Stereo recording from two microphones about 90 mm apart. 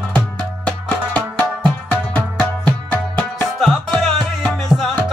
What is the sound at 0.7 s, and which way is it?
Music, 10° left (ahead or behind).